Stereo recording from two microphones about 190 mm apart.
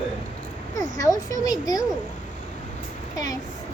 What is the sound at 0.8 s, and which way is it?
A child's voice, 20° left (ahead or behind).